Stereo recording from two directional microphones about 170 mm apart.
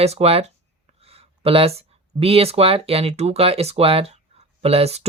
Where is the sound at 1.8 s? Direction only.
35° right (ahead or behind).